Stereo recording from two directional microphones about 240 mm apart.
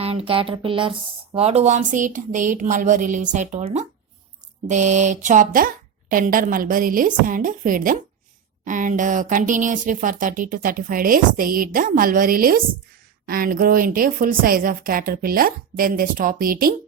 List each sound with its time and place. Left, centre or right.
0.0 s speech: right